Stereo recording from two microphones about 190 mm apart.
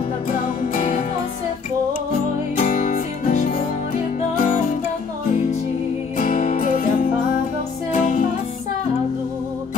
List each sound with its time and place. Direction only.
0.7 s music: 45° left (ahead or behind)
2.6 s music: 45° left (ahead or behind)
6.1 s music: 45° left (ahead or behind)